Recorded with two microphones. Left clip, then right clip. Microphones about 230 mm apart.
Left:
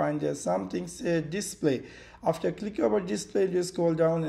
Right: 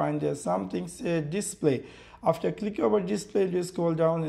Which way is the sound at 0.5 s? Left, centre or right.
Centre.